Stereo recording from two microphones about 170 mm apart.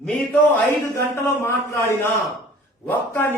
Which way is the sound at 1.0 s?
15° left (ahead or behind).